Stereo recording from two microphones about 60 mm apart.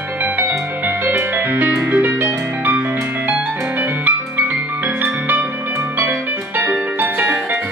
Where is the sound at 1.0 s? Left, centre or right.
Right.